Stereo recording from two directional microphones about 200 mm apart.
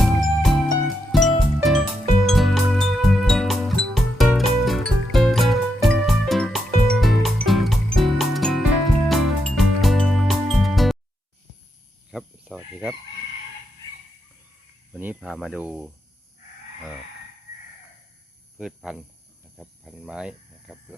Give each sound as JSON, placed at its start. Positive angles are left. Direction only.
{"t": 0.0, "sound": "music", "side_deg": 0}
{"t": 12.1, "sound": "chicken", "side_deg": -5}
{"t": 14.9, "sound": "speech", "side_deg": -5}
{"t": 18.5, "sound": "speech", "side_deg": 0}